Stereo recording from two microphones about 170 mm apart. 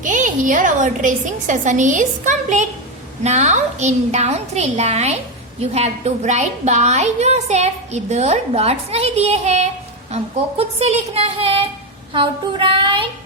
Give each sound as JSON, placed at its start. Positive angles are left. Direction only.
{"t": 0.0, "sound": "a woman's voice", "side_deg": -50}
{"t": 12.1, "sound": "child singing", "side_deg": -30}